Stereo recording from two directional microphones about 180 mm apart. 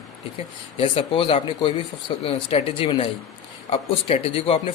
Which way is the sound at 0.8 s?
30° left (ahead or behind).